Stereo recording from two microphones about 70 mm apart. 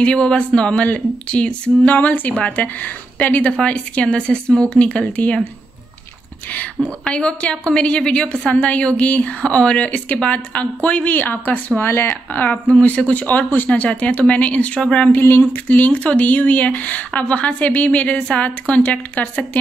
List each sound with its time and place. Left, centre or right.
0.0 s a woman's voice: centre
7.1 s a woman's voice: centre